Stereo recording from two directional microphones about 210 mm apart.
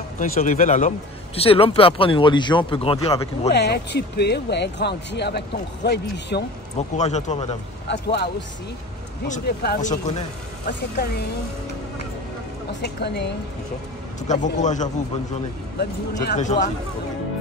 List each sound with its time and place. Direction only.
0.2 s a man's voice: 35° left (ahead or behind)
3.5 s speech: 55° left (ahead or behind)
7.0 s speech: 35° left (ahead or behind)
7.9 s speech: 55° left (ahead or behind)
9.8 s speech: 35° left (ahead or behind)
12.8 s speech: 55° left (ahead or behind)
14.2 s speech: 35° left (ahead or behind)
16.3 s speech: 35° left (ahead or behind)